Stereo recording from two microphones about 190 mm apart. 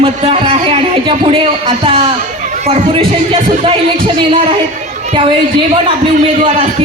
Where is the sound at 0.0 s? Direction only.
30° right (ahead or behind).